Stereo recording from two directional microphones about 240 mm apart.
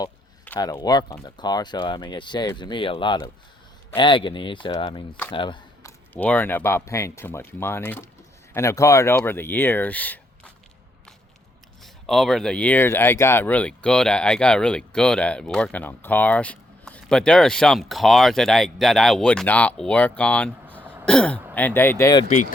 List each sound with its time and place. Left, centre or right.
0.0 s speech: centre
5.3 s a sound: centre
6.1 s speech: centre
11.8 s speech: centre
22.3 s speech: left